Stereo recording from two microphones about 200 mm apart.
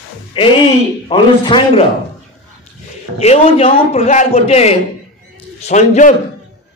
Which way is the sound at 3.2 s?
30° left (ahead or behind).